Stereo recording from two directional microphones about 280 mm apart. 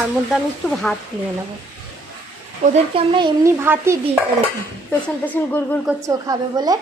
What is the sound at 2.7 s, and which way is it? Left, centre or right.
Speech, centre.